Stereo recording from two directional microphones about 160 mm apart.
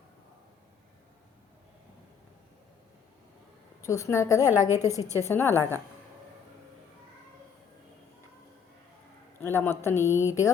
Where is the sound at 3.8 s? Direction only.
20° left (ahead or behind).